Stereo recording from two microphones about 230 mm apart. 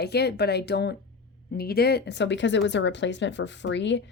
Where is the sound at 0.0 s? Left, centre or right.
Left.